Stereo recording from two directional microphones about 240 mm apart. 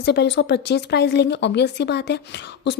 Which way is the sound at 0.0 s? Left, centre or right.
Left.